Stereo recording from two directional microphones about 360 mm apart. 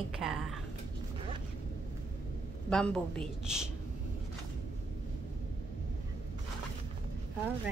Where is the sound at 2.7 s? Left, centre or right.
Centre.